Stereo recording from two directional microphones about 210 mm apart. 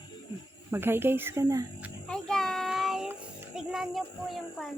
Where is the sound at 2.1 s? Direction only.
Centre (ahead or behind).